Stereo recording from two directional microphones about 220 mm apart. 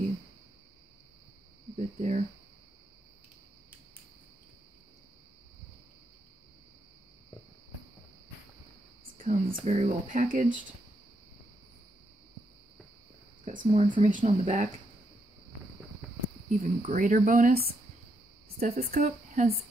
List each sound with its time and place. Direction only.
1.8 s speech: 30° right (ahead or behind)
9.2 s speech: 35° right (ahead or behind)
13.5 s speech: 30° right (ahead or behind)
16.4 s speech: 30° right (ahead or behind)
18.8 s speech: 30° right (ahead or behind)